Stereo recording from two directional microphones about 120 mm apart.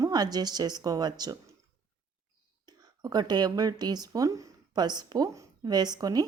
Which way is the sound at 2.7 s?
35° right (ahead or behind).